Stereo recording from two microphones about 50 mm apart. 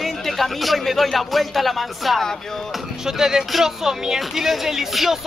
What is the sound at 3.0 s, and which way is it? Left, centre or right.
Speech, centre.